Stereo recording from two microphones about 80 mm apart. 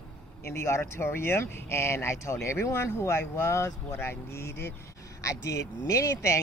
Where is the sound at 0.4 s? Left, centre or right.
Left.